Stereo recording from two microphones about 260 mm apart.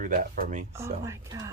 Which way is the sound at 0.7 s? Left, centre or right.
Centre.